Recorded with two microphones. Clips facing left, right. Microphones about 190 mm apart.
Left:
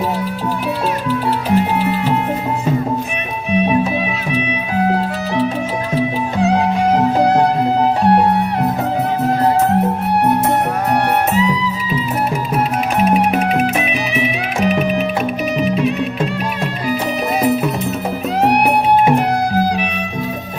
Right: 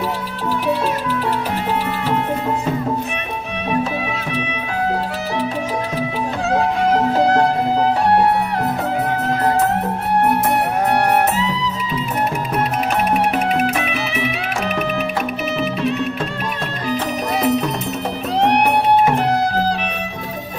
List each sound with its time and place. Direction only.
6.4 s music: 15° left (ahead or behind)
13.1 s music: 15° left (ahead or behind)
15.6 s music: 15° left (ahead or behind)
17.4 s music: 5° left (ahead or behind)